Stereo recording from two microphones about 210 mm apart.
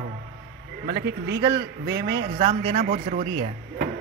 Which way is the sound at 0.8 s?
50° right (ahead or behind).